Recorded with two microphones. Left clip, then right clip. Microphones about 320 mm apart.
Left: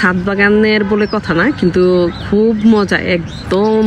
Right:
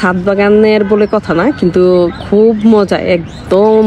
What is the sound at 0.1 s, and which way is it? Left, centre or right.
Speech, right.